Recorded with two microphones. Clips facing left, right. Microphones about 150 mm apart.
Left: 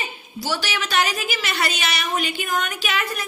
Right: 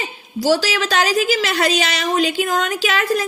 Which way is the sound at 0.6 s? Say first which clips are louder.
Right 4 dB; 90° right.